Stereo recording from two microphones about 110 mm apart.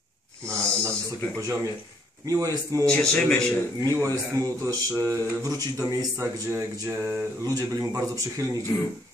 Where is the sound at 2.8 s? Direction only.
10° left (ahead or behind).